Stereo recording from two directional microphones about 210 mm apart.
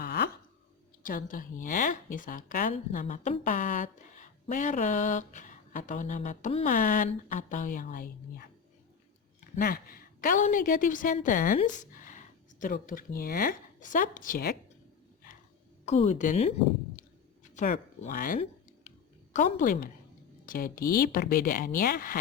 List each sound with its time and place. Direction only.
0.0 s a sound: 50° left (ahead or behind)
1.0 s speech: 40° left (ahead or behind)
9.6 s a woman's voice: 45° left (ahead or behind)
15.9 s speech: 30° left (ahead or behind)